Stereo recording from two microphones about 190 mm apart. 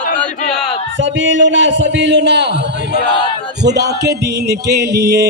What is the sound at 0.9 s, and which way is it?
A man's voice, 75° right (ahead or behind).